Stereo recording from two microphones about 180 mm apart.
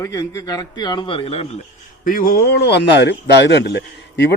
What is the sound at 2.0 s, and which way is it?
Speech, 50° left (ahead or behind).